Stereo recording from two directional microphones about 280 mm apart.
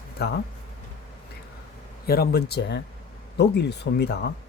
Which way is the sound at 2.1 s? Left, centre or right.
Left.